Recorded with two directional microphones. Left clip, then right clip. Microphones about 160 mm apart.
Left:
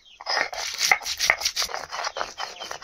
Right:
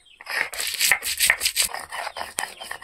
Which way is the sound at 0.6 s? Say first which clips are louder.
Right 3 dB; 10° left (ahead or behind).